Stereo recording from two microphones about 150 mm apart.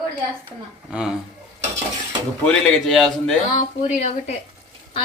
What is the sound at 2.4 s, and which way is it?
Speech, 5° left (ahead or behind).